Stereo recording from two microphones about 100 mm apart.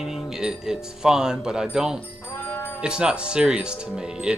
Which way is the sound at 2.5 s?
20° left (ahead or behind).